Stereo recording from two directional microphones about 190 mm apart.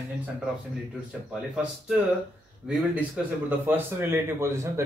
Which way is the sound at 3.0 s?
10° right (ahead or behind).